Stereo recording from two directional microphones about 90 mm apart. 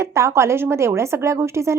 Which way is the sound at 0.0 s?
35° right (ahead or behind).